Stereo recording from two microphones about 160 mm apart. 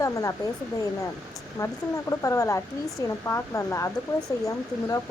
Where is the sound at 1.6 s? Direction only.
20° left (ahead or behind).